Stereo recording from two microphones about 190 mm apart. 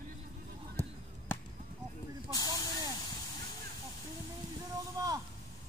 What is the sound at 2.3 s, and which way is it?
Snake, 20° left (ahead or behind).